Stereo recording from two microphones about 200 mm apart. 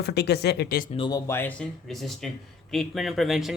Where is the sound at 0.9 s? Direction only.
25° left (ahead or behind).